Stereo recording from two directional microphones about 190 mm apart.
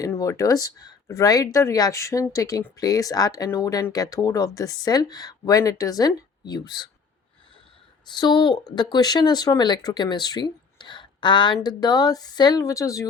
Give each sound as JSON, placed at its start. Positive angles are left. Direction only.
{"t": 0.0, "sound": "speech", "side_deg": 15}
{"t": 8.0, "sound": "speech", "side_deg": 25}